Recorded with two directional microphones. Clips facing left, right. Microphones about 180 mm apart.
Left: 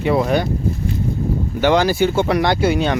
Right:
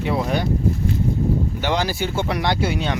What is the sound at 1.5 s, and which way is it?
Speech, 55° left (ahead or behind).